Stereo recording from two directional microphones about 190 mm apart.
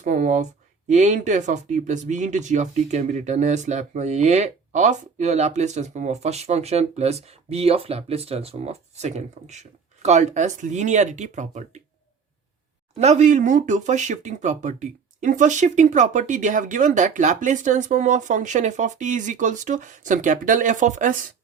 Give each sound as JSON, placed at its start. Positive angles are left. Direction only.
{"t": 0.0, "sound": "speech", "side_deg": -40}
{"t": 13.0, "sound": "speech", "side_deg": -35}